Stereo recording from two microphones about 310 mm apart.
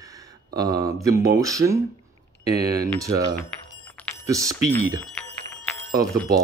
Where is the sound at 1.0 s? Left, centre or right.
Centre.